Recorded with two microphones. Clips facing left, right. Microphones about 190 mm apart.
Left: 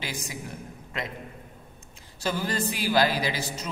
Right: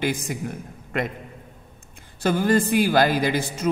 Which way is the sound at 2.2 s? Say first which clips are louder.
Right 9 dB; 50° right (ahead or behind).